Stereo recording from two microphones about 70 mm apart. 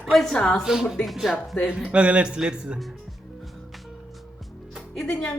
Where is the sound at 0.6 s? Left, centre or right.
Centre.